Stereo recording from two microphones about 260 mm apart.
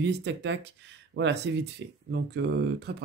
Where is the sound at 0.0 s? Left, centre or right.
Right.